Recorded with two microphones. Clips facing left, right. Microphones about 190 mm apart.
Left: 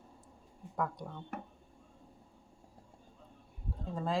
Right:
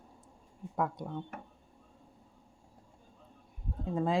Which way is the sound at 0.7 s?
20° right (ahead or behind).